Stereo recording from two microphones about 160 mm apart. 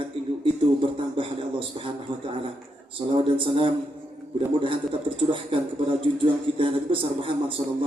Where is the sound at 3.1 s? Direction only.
30° right (ahead or behind).